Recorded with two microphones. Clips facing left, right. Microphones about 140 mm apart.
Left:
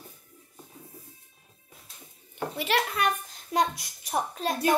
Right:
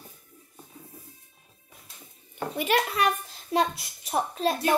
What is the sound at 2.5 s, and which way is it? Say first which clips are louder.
Speech: right 3 dB; 50° right (ahead or behind).